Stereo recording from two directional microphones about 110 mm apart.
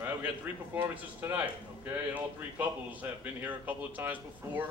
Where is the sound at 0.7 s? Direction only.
15° right (ahead or behind).